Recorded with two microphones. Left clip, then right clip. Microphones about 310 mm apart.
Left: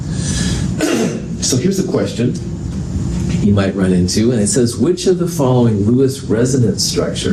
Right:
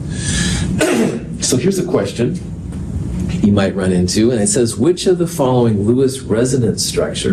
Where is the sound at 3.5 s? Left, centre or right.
Right.